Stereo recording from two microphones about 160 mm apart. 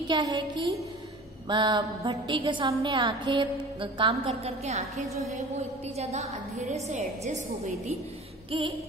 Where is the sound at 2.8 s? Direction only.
30° right (ahead or behind).